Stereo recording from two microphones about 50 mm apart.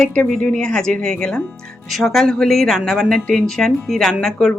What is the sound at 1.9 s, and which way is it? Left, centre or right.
Speech, centre.